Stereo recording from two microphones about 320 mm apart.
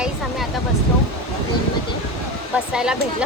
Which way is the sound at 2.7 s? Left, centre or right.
Centre.